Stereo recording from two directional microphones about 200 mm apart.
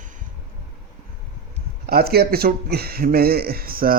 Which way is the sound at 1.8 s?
50° right (ahead or behind).